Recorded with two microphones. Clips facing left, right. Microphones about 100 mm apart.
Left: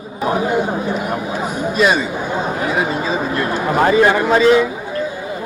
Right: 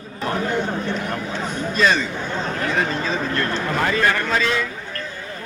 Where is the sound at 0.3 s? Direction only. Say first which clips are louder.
Left 5 dB; 10° left (ahead or behind).